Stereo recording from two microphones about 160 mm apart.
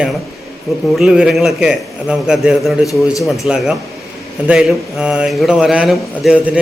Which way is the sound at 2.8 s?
20° left (ahead or behind).